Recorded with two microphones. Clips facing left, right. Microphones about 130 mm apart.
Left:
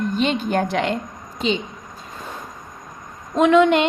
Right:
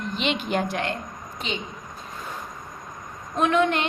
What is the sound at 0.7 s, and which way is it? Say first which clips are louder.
Speech: left 6 dB; 85° left.